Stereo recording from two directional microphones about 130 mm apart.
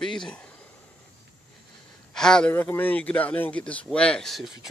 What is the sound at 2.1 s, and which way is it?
Speech, 5° left (ahead or behind).